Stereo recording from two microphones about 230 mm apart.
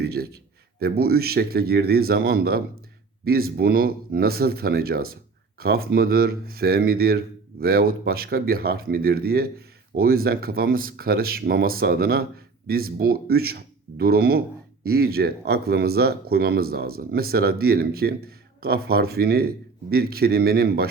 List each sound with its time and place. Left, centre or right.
0.0 s speech: right